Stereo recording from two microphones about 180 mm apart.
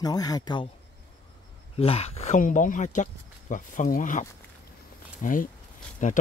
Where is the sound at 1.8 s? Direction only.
35° left (ahead or behind).